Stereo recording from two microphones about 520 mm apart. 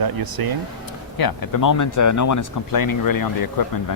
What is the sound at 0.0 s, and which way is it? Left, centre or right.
Speech, right.